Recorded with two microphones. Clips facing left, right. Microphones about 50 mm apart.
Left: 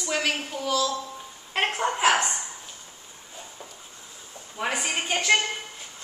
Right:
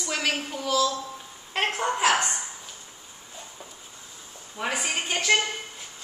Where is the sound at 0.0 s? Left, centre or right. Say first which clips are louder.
Left 1 dB; centre.